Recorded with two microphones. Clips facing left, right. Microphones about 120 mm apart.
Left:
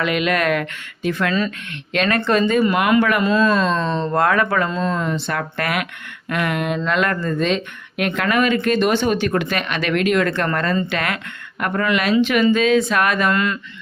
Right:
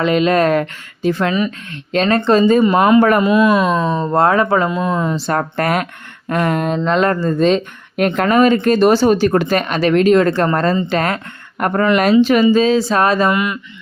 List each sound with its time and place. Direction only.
0.0 s speech: 30° right (ahead or behind); by 4.1 s 10° right (ahead or behind)
4.1 s speech: 30° right (ahead or behind)
5.1 s speech: 40° right (ahead or behind)
13.3 s speech: 15° right (ahead or behind)